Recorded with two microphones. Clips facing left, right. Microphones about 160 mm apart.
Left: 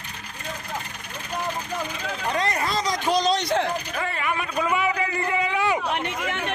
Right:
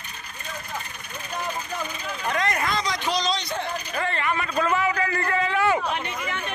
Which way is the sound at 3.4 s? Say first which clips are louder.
Left 7 dB; 90° left.